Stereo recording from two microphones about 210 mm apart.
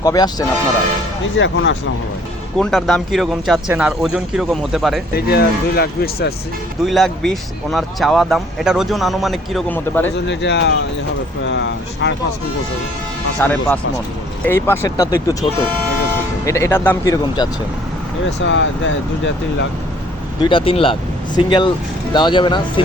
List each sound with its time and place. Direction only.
0.0 s speech: 15° left (ahead or behind)
1.4 s speech: 60° left (ahead or behind)
2.6 s speech: centre (ahead or behind)
5.1 s speech: 50° left (ahead or behind)
6.8 s speech: centre (ahead or behind)
10.2 s speech: 55° left (ahead or behind)
13.4 s speech: 10° left (ahead or behind)
16.5 s speech: 15° left (ahead or behind)
18.3 s speech: 60° left (ahead or behind)
20.4 s speech: 25° left (ahead or behind)